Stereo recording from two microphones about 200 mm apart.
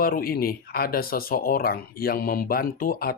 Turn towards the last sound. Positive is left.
turn(degrees=45)  # may be behind; listen again after turning